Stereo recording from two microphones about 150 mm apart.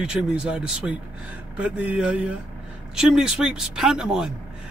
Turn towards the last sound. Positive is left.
turn(degrees=-5)  # may be behind; listen again after turning